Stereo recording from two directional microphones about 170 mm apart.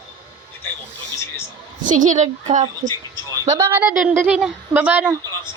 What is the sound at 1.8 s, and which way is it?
A woman's voice, 50° right (ahead or behind).